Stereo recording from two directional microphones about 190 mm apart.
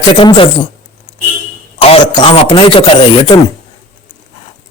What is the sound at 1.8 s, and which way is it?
Speech, 25° left (ahead or behind).